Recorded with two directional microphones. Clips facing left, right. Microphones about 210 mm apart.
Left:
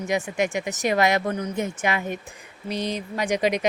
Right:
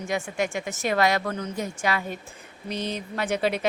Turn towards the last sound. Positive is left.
turn(degrees=15)  # may be behind; listen again after turning